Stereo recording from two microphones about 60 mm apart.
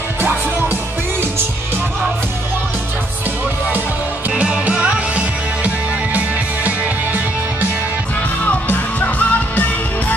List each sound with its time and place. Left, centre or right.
0.2 s music: right
4.4 s music: centre
8.5 s music: left